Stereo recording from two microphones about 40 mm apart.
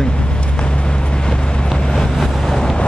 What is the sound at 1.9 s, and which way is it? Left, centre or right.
Vehicle, centre.